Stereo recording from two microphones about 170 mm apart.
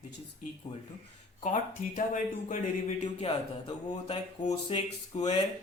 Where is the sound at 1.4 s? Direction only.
45° left (ahead or behind).